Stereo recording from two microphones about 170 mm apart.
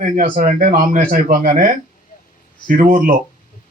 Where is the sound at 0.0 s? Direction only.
50° right (ahead or behind).